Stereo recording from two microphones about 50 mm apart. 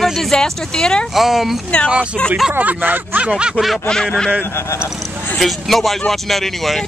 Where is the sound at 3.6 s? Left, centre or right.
Left.